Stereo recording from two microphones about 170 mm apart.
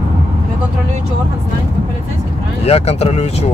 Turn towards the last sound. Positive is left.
turn(degrees=40)  # may be behind; listen again after turning